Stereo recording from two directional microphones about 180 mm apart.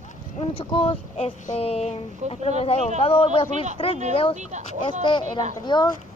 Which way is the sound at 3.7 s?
30° left (ahead or behind).